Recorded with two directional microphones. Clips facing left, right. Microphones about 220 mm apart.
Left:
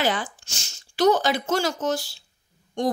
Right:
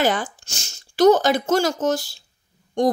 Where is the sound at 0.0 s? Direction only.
45° right (ahead or behind).